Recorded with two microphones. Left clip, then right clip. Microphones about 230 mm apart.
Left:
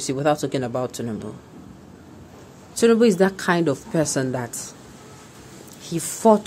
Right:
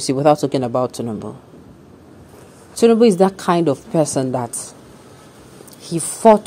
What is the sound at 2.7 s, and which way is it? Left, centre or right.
A woman's voice, centre.